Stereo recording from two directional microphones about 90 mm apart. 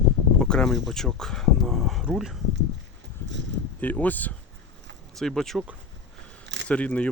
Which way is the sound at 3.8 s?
20° left (ahead or behind).